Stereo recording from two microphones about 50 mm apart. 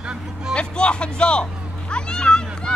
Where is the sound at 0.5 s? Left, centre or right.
Centre.